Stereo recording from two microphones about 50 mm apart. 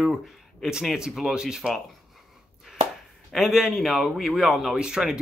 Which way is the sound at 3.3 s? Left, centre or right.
Centre.